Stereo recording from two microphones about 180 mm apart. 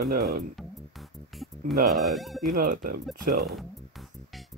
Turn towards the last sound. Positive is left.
turn(degrees=0)  # may be behind; listen again after turning